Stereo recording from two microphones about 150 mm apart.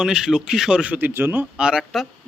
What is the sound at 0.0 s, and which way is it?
A man's voice, 5° right (ahead or behind).